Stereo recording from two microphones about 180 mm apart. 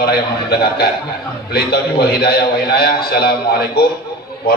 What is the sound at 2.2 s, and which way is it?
A man's voice, 60° left (ahead or behind).